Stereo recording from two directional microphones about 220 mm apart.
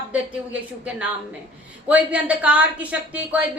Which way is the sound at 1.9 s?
5° right (ahead or behind).